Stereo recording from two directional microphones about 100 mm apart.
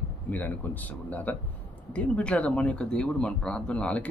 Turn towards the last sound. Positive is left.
turn(degrees=10)  # may be behind; listen again after turning